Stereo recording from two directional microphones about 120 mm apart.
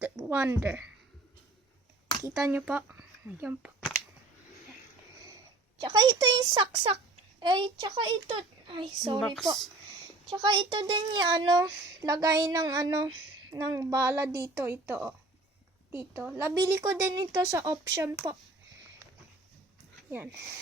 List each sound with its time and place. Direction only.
0.0 s a woman's voice: 15° right (ahead or behind)
2.5 s speech: 15° right (ahead or behind)
5.8 s a child's voice: 40° right (ahead or behind)
9.2 s speech: centre (ahead or behind)
10.2 s a child's voice: 45° right (ahead or behind)
20.1 s speech: 15° right (ahead or behind)